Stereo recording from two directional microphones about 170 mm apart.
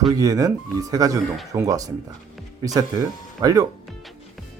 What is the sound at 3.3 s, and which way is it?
Speech, 20° right (ahead or behind).